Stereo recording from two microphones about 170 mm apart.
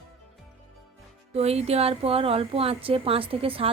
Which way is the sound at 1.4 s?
35° right (ahead or behind).